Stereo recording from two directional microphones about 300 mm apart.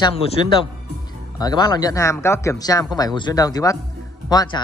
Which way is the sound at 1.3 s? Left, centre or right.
Centre.